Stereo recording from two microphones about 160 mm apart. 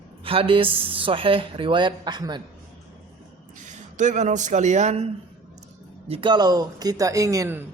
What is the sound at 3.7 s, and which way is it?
Speech, 50° right (ahead or behind).